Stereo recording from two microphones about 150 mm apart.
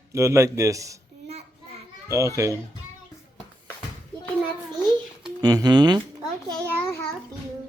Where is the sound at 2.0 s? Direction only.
20° right (ahead or behind).